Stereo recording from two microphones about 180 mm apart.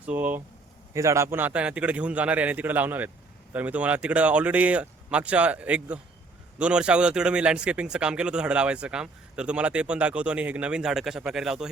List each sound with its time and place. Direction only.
0.0 s a man's voice: 10° right (ahead or behind)